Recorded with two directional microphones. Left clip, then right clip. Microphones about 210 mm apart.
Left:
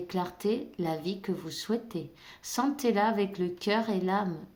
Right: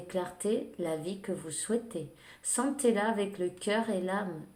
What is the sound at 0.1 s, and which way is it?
Speech, 55° left (ahead or behind).